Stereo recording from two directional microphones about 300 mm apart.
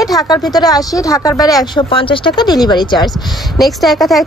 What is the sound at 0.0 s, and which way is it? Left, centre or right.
Speech, centre.